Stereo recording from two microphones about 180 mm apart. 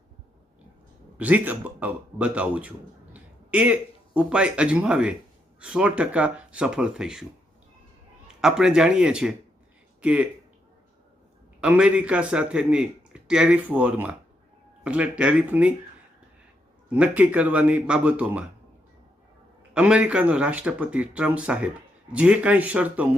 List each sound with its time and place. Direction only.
1.2 s speech: 10° right (ahead or behind)
8.4 s speech: 5° right (ahead or behind)
11.6 s speech: 5° right (ahead or behind)
16.9 s speech: 10° right (ahead or behind)
19.7 s speech: 5° right (ahead or behind)